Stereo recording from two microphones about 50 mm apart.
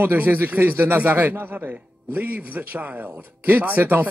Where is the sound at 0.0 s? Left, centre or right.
Right.